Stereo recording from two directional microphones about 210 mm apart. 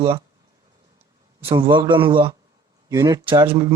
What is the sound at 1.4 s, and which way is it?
Speech, 25° right (ahead or behind).